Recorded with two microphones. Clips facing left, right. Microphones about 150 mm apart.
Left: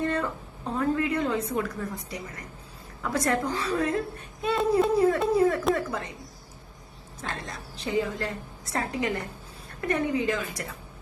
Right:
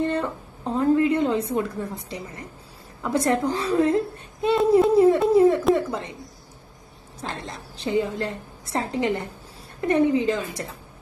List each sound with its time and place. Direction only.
0.0 s a woman's voice: 30° right (ahead or behind)
7.2 s a woman's voice: 25° right (ahead or behind)